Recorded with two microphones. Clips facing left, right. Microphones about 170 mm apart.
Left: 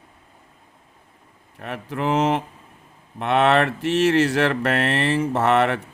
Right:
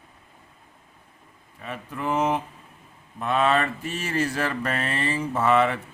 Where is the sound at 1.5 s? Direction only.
65° left (ahead or behind).